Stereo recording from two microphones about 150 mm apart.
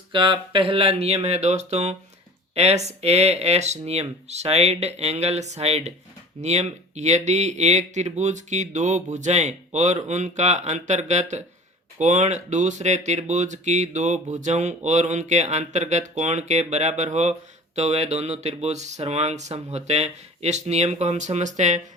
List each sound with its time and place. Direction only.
0.1 s speech: 35° right (ahead or behind); by 21.8 s 50° right (ahead or behind)